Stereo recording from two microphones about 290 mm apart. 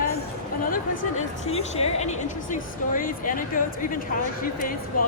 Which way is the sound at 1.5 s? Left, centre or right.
Left.